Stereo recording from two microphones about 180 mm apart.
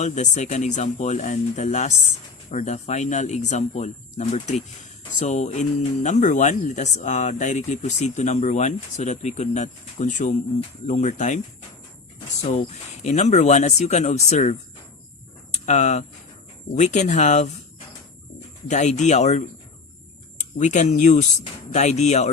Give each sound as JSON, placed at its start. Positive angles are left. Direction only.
{"t": 0.0, "sound": "speech", "side_deg": 40}
{"t": 12.4, "sound": "speech", "side_deg": 40}
{"t": 15.5, "sound": "speech", "side_deg": 40}
{"t": 18.7, "sound": "speech", "side_deg": 40}